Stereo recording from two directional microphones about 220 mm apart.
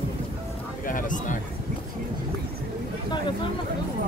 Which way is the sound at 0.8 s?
35° left (ahead or behind).